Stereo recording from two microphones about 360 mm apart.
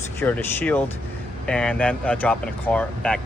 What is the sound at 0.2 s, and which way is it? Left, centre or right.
Speech, centre.